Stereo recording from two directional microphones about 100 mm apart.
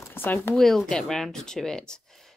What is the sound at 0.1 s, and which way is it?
Speech, 20° left (ahead or behind).